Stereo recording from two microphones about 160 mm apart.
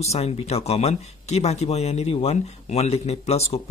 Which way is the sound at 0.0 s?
40° left (ahead or behind).